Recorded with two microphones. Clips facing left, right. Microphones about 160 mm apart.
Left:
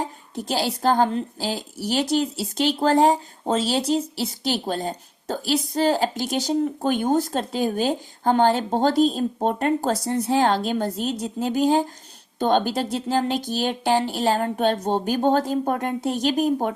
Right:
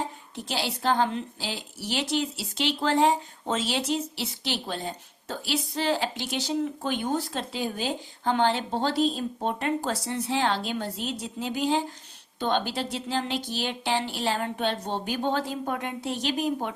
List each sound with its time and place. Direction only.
0.3 s a woman's voice: 40° left (ahead or behind)